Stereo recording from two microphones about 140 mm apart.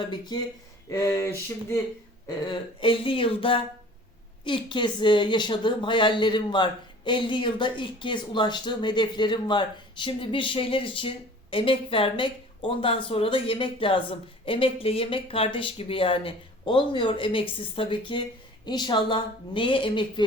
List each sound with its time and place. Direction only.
0.0 s a woman's voice: 30° left (ahead or behind)